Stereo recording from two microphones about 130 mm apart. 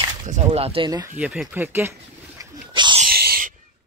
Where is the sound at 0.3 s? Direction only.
55° right (ahead or behind).